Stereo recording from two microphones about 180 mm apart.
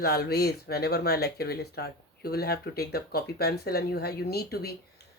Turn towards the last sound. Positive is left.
turn(degrees=60)  # may be behind; listen again after turning